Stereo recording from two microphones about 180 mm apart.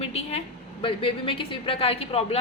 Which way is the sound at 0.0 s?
35° left (ahead or behind).